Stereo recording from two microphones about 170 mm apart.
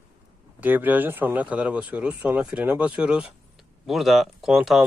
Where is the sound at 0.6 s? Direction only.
10° right (ahead or behind).